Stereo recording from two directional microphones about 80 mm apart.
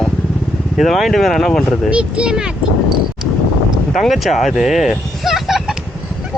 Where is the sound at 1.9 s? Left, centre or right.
Centre.